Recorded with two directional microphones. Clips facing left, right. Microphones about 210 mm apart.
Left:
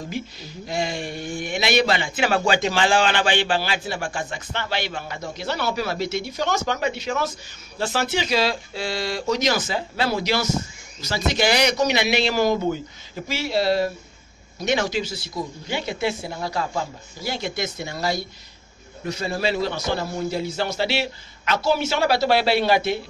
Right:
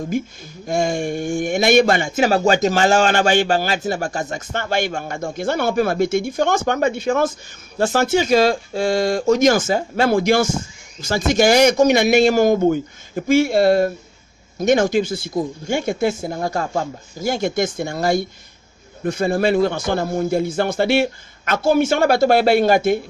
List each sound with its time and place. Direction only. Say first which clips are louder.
0.1 s speech: right 7 dB; 45° right (ahead or behind)